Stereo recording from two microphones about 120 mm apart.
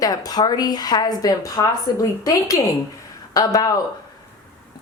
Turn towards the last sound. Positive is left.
turn(degrees=30)  # may be behind; listen again after turning